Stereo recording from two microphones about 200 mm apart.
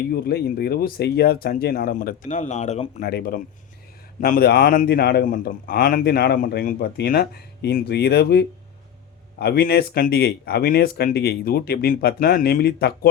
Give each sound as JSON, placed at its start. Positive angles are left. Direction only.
{"t": 0.1, "sound": "speech", "side_deg": 50}
{"t": 3.0, "sound": "speech", "side_deg": 55}